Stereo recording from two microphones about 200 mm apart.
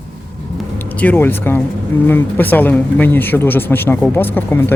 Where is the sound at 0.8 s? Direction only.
10° left (ahead or behind).